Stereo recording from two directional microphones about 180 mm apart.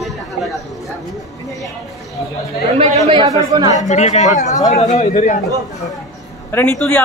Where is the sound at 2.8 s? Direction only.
40° right (ahead or behind).